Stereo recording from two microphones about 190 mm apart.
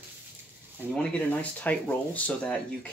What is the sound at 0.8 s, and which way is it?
Speech, 10° right (ahead or behind).